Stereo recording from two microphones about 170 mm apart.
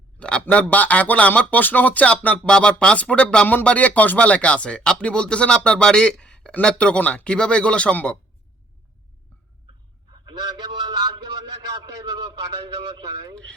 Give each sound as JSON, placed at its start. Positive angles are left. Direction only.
{"t": 0.2, "sound": "speech", "side_deg": 5}
{"t": 0.7, "sound": "a sound", "side_deg": 10}
{"t": 10.2, "sound": "a man's voice", "side_deg": -25}